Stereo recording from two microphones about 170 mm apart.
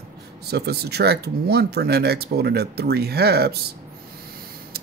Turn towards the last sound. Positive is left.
turn(degrees=-70)  # may be behind; listen again after turning